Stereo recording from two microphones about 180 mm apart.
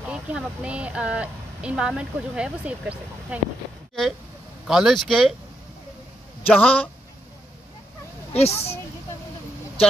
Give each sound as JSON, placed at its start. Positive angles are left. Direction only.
{"t": 0.0, "sound": "speech", "side_deg": -5}
{"t": 4.6, "sound": "speech", "side_deg": 0}
{"t": 6.4, "sound": "a man's voice", "side_deg": 10}
{"t": 8.3, "sound": "speech", "side_deg": 35}